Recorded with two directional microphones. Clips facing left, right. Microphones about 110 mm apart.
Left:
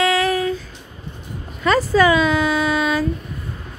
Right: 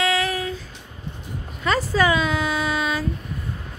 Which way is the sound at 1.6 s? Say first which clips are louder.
Left 5 dB; 90° left.